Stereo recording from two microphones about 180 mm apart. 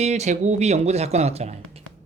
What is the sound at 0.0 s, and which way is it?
Speech, 40° right (ahead or behind).